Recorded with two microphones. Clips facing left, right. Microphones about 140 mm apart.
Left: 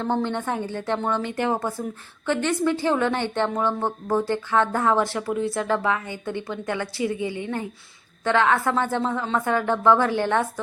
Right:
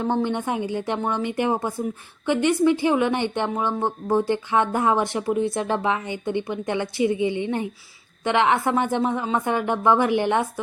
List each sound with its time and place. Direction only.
0.0 s a woman's voice: 15° right (ahead or behind)